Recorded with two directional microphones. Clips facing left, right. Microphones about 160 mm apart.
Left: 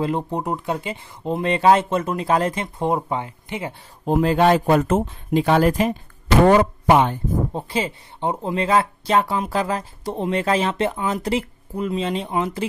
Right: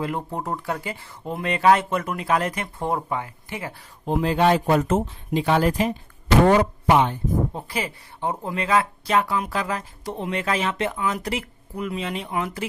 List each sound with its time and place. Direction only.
0.0 s speech: 20° left (ahead or behind)
4.0 s speech: 45° left (ahead or behind)
7.5 s speech: 25° left (ahead or behind)